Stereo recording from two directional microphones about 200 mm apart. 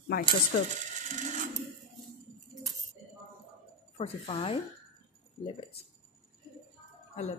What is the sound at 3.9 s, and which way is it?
Speech, 30° left (ahead or behind).